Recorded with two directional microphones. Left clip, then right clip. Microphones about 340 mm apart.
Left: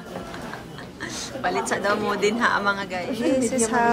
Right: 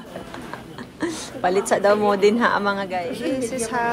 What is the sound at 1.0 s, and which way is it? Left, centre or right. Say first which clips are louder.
A woman's voice: right 5 dB; centre.